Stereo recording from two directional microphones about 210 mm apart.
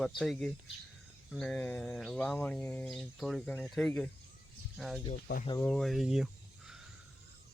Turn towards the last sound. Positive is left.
turn(degrees=0)  # may be behind; listen again after turning